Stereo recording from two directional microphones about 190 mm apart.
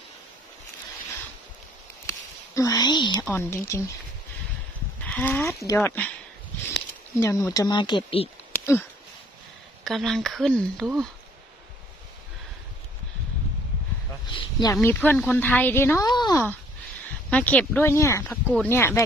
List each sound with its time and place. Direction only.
2.0 s a sound: 15° left (ahead or behind)
3.3 s speech: 15° left (ahead or behind)
5.0 s speech: 5° left (ahead or behind)
5.5 s speech: 15° left (ahead or behind)
8.5 s a sound: 10° left (ahead or behind)
9.8 s speech: centre (ahead or behind)
14.3 s a sound: 20° left (ahead or behind)
14.8 s speech: 10° left (ahead or behind)
17.3 s speech: 5° left (ahead or behind)